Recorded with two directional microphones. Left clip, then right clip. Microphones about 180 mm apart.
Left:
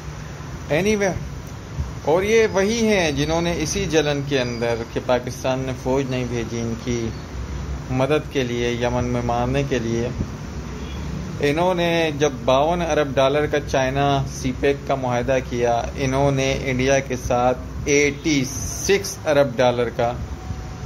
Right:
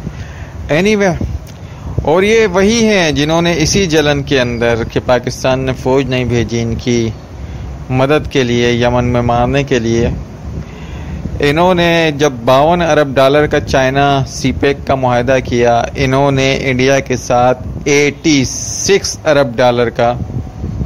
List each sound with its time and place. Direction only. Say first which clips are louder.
0.7 s a man's voice: right 8 dB; 40° right (ahead or behind)
11.4 s a man's voice: right 9 dB; 40° right (ahead or behind)